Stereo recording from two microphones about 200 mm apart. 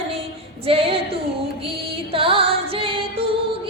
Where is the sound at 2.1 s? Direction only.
25° right (ahead or behind).